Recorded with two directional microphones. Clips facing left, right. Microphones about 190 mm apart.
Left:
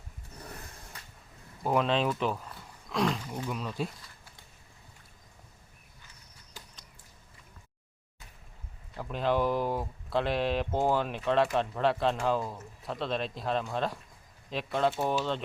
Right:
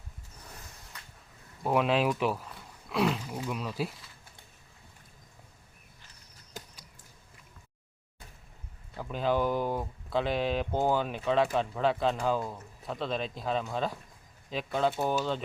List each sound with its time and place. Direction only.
1.6 s speech: 5° right (ahead or behind)
9.0 s speech: centre (ahead or behind)